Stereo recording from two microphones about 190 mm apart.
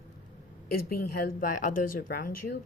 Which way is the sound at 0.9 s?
50° left (ahead or behind).